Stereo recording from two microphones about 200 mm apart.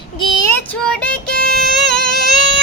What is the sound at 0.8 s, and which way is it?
Music, 5° left (ahead or behind).